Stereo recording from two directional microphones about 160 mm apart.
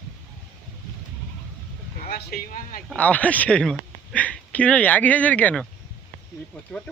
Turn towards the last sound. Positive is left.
turn(degrees=5)  # may be behind; listen again after turning